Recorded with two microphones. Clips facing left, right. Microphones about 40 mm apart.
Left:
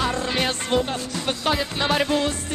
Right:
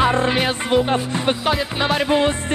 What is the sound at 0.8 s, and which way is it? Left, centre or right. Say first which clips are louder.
Music: right 7 dB; right.